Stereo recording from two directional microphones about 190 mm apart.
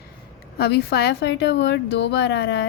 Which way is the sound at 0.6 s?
55° left (ahead or behind).